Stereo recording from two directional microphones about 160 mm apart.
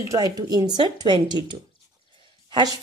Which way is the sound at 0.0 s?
20° right (ahead or behind).